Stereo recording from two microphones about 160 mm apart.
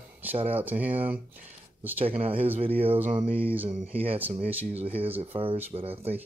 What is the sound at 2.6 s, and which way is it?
Speech, 35° right (ahead or behind).